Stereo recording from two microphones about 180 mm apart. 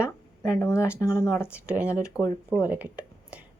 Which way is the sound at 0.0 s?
15° left (ahead or behind).